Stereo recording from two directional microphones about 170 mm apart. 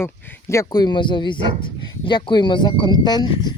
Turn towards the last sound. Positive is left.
turn(degrees=25)  # may be behind; listen again after turning